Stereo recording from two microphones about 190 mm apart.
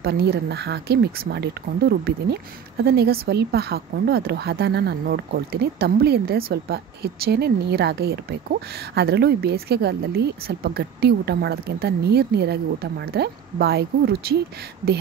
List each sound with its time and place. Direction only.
0.0 s speech: 60° right (ahead or behind)